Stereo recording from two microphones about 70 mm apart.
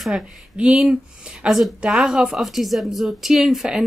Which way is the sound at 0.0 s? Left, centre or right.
Centre.